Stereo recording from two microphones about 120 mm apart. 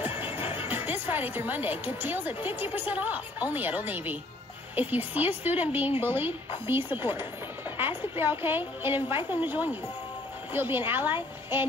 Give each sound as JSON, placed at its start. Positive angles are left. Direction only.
{"t": 0.2, "sound": "music", "side_deg": -15}
{"t": 0.6, "sound": "speech", "side_deg": -15}